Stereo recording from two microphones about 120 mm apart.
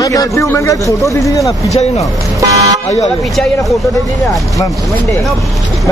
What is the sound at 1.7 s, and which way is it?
Speech, 60° left (ahead or behind).